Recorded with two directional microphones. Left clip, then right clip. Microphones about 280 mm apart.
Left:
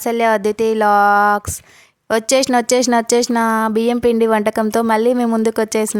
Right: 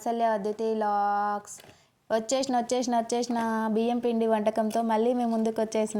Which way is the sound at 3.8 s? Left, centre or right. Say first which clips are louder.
Left 11 dB; left.